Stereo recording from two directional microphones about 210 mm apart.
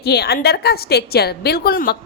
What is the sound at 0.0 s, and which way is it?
A woman's voice, 50° left (ahead or behind).